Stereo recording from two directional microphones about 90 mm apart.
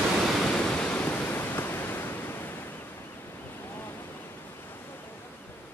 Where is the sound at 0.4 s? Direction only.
10° left (ahead or behind).